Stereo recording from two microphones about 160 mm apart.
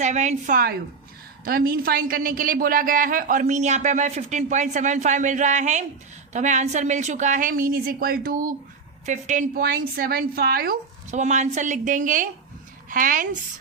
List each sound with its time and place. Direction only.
0.0 s a woman's voice: 45° right (ahead or behind); by 8.5 s 60° right (ahead or behind)
9.0 s a woman's voice: 50° right (ahead or behind)
9.6 s a woman's voice: 75° right (ahead or behind)
11.1 s a woman's voice: 45° right (ahead or behind)